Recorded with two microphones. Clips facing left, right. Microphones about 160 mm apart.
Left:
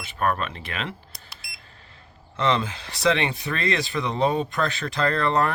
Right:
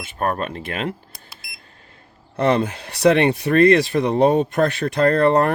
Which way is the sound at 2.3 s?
50° right (ahead or behind).